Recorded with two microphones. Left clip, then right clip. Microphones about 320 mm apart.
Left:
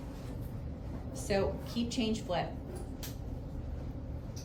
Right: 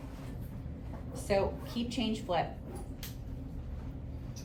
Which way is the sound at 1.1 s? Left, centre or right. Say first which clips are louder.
Right 2 dB; centre.